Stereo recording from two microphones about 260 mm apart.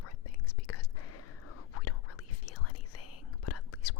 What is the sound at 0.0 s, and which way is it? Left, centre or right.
Whispering, left.